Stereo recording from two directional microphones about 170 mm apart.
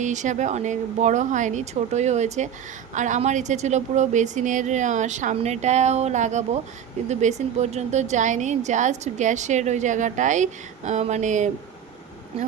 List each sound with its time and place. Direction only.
0.0 s a woman's voice: 45° right (ahead or behind)